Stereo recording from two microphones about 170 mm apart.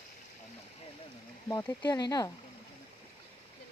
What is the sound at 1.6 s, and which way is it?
Speech, 20° left (ahead or behind).